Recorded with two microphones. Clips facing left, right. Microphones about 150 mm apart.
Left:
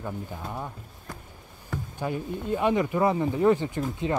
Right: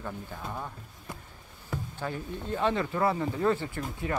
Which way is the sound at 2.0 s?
15° left (ahead or behind).